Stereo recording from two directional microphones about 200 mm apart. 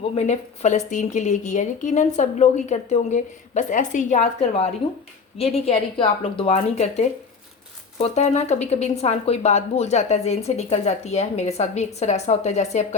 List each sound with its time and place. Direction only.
0.1 s a woman's voice: 35° left (ahead or behind)